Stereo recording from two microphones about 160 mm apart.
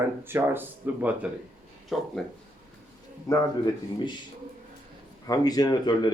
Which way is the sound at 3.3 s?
20° left (ahead or behind).